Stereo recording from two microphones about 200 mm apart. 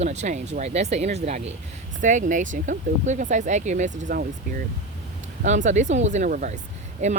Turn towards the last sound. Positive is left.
turn(degrees=-35)  # may be behind; listen again after turning